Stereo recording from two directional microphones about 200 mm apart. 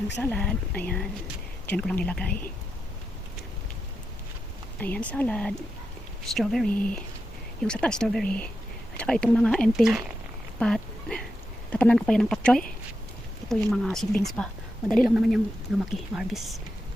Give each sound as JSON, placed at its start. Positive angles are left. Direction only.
{"t": 0.2, "sound": "speech", "side_deg": 5}
{"t": 4.8, "sound": "speech", "side_deg": 5}